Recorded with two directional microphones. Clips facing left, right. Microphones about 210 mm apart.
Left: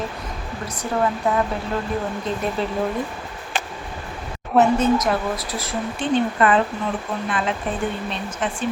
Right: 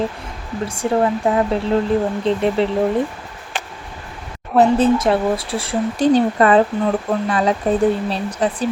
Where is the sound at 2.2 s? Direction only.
25° right (ahead or behind).